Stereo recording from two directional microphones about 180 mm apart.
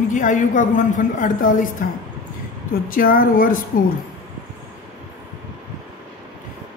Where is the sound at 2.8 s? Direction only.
55° left (ahead or behind).